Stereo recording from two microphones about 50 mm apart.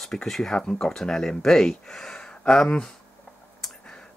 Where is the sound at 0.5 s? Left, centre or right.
Centre.